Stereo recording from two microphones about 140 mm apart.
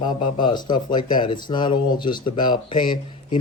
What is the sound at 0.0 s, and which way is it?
Speech, 35° left (ahead or behind).